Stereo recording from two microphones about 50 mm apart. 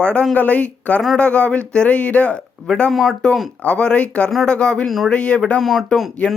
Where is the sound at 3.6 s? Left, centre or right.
Left.